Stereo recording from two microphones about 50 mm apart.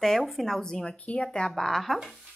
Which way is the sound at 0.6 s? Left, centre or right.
Centre.